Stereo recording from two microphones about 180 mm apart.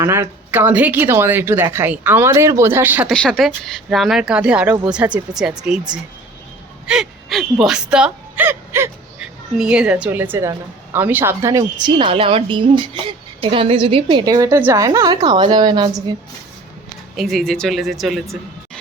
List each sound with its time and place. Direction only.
0.0 s a woman's voice: 15° right (ahead or behind)
3.1 s speech: 5° left (ahead or behind)
6.8 s gasp: 5° right (ahead or behind)
7.6 s speech: 5° right (ahead or behind); by 16.1 s 20° right (ahead or behind)
17.2 s speech: centre (ahead or behind)